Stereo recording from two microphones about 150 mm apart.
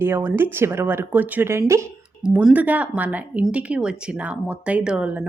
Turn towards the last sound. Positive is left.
turn(degrees=-5)  # may be behind; listen again after turning